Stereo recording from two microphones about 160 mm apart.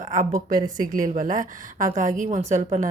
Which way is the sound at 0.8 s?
55° right (ahead or behind).